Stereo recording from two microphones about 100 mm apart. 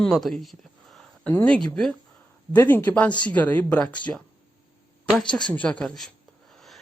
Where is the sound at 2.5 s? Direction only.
20° left (ahead or behind).